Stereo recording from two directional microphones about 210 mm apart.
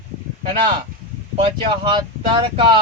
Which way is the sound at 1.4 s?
25° right (ahead or behind).